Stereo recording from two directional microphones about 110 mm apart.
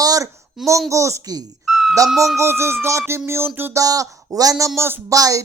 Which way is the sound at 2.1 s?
Centre (ahead or behind).